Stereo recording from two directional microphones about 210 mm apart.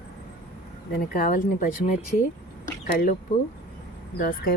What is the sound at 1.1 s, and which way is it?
A woman's voice, 45° left (ahead or behind).